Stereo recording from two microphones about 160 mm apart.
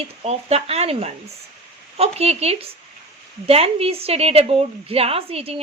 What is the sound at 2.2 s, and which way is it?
Speech, 40° right (ahead or behind).